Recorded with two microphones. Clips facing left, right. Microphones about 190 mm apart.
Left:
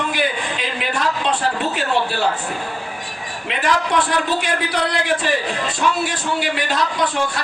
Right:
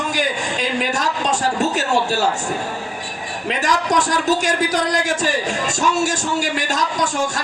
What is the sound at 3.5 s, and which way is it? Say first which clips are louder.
A man's voice: even; 40° right (ahead or behind).